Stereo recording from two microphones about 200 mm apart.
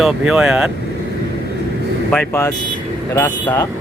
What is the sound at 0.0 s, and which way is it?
Speech, 5° right (ahead or behind).